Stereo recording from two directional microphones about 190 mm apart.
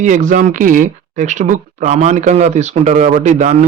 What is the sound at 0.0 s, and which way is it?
A man's voice, 40° right (ahead or behind).